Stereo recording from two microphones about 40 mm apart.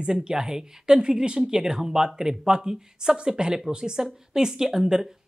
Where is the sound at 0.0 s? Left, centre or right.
Right.